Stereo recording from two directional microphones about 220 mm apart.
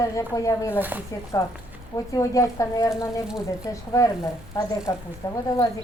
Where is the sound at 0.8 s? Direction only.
10° right (ahead or behind).